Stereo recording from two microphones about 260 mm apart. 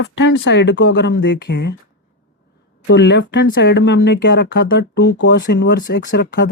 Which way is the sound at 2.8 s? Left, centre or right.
Left.